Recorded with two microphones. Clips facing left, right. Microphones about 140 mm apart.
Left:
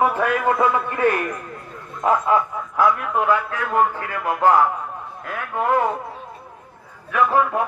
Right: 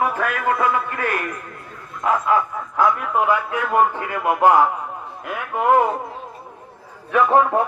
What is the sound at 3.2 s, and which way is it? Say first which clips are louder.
Speech: even; 15° right (ahead or behind).